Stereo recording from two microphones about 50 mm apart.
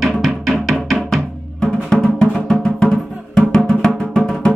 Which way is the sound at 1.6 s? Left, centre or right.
Centre.